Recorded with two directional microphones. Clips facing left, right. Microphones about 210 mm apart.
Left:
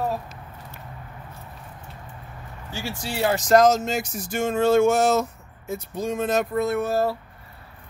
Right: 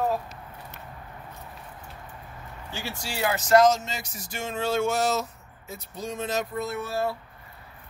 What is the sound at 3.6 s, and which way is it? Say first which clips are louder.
Speech: left 1 dB; 45° left (ahead or behind).